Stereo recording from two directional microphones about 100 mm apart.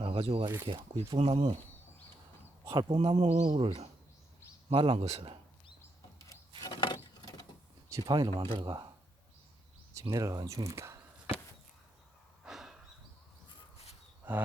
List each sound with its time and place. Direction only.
0.0 s speech: 70° right (ahead or behind)
0.7 s speech: 60° right (ahead or behind)
1.2 s speech: 90° right
2.9 s speech: 85° right
6.1 s a sound: 30° left (ahead or behind)
6.6 s a sound: 45° left (ahead or behind)
8.0 s speech: 45° right (ahead or behind)
8.4 s speech: 55° right (ahead or behind)
9.9 s speech: 35° right (ahead or behind)
12.5 s a sound: 5° right (ahead or behind)
14.3 s speech: 15° right (ahead or behind)